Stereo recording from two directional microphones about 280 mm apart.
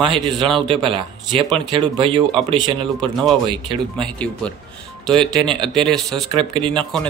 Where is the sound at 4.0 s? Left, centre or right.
Centre.